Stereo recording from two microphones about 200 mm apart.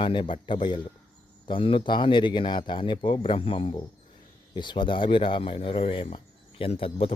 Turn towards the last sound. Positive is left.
turn(degrees=30)  # may be behind; listen again after turning